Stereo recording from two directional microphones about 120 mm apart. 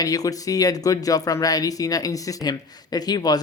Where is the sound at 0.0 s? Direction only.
30° left (ahead or behind).